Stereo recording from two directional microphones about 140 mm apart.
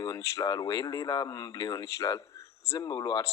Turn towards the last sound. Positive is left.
turn(degrees=30)  # may be behind; listen again after turning